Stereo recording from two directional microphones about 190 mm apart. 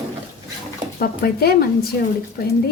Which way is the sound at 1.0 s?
55° left (ahead or behind).